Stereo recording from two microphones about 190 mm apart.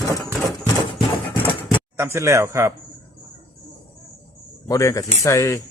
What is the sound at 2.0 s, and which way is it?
Speech, 15° right (ahead or behind).